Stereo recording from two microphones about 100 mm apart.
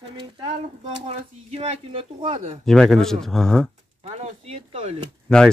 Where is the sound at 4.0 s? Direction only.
90° right.